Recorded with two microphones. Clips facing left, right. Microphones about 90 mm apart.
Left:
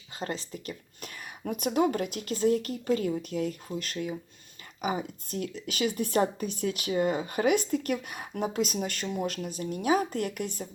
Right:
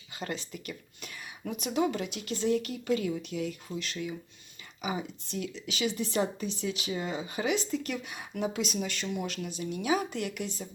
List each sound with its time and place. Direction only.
0.2 s speech: 35° left (ahead or behind)